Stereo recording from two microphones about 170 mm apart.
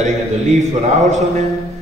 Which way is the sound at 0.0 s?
40° right (ahead or behind).